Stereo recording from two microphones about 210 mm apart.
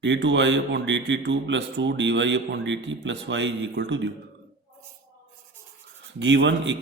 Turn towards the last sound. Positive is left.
turn(degrees=-60)  # may be behind; listen again after turning